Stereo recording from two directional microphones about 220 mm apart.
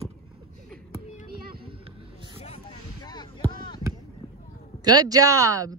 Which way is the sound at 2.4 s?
20° left (ahead or behind).